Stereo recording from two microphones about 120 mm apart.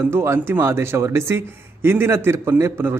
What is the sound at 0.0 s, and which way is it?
A man's voice, 20° right (ahead or behind).